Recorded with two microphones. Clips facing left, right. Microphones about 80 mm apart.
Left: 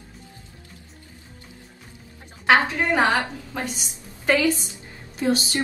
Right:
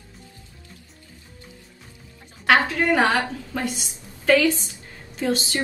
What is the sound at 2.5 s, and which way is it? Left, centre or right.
A woman's voice, left.